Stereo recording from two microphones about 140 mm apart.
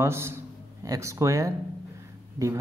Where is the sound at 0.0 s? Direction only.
20° right (ahead or behind).